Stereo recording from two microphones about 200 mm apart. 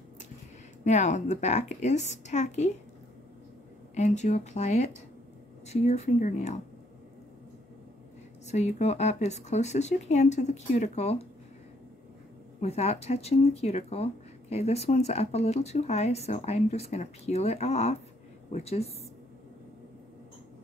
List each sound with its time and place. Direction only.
0.8 s speech: 35° left (ahead or behind)
3.9 s speech: 35° left (ahead or behind)
8.5 s speech: 35° left (ahead or behind)
12.5 s speech: 30° left (ahead or behind)